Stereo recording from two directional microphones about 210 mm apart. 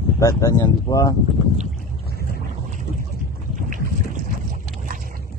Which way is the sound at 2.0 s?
45° left (ahead or behind).